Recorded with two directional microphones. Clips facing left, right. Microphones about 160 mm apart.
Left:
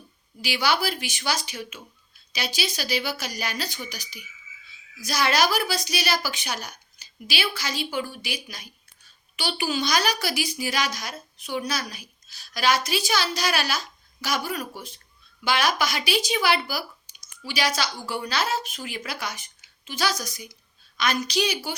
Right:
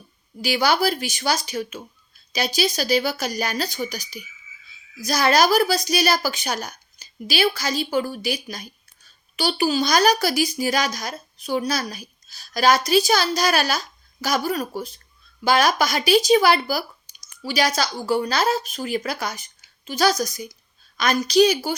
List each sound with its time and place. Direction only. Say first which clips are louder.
0.4 s speech: right 5 dB; 45° right (ahead or behind)